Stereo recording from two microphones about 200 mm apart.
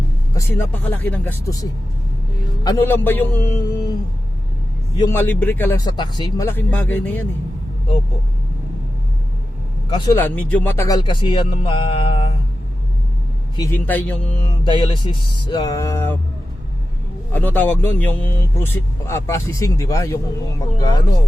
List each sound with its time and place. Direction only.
0.3 s speech: 10° left (ahead or behind)
2.6 s speech: 10° left (ahead or behind)
4.9 s speech: 15° left (ahead or behind)
9.9 s music: 20° left (ahead or behind)
10.2 s music: 10° left (ahead or behind); by 12.3 s 25° left (ahead or behind)
13.6 s speech: 10° left (ahead or behind)
14.6 s music: 25° left (ahead or behind)
17.3 s speech: 10° left (ahead or behind)
20.7 s music: 20° left (ahead or behind)